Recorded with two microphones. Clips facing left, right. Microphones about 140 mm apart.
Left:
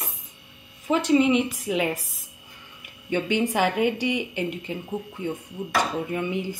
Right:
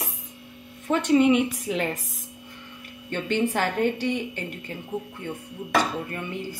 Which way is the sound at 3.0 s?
10° left (ahead or behind).